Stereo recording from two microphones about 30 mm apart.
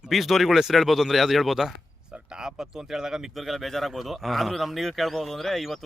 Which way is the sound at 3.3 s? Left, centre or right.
Centre.